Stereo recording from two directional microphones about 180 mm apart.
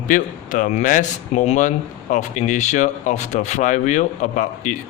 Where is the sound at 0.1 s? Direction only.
45° left (ahead or behind).